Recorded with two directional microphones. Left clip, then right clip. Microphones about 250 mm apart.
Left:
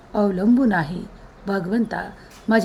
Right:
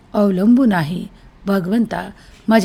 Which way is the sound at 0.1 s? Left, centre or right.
Right.